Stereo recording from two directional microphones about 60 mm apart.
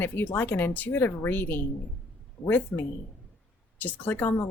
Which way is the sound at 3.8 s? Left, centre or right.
Left.